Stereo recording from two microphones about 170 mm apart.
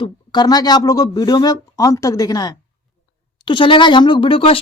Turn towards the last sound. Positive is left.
turn(degrees=30)  # may be behind; listen again after turning